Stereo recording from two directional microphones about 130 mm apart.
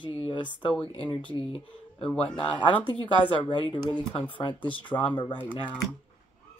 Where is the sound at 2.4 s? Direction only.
40° left (ahead or behind).